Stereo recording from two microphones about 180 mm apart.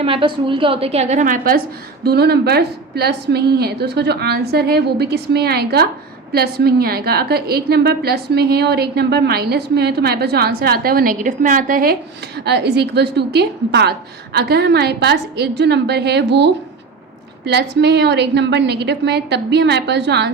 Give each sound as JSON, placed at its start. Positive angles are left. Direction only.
{"t": 0.0, "sound": "a woman's voice", "side_deg": -30}
{"t": 2.0, "sound": "a woman's voice", "side_deg": -60}
{"t": 12.5, "sound": "a woman's voice", "side_deg": -65}